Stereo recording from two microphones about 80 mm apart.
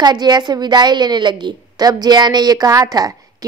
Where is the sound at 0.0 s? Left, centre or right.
Right.